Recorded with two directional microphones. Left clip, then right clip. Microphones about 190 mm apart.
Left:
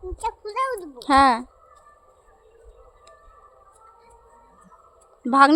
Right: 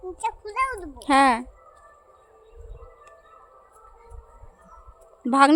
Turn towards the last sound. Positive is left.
turn(degrees=0)  # may be behind; listen again after turning